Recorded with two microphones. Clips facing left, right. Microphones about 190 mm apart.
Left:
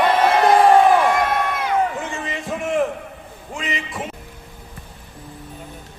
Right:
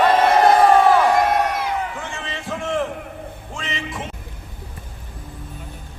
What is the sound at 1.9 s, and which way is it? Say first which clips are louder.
Speech: left 3 dB; 15° left (ahead or behind).